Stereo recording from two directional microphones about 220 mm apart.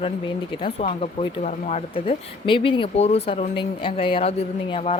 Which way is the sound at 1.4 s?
30° left (ahead or behind).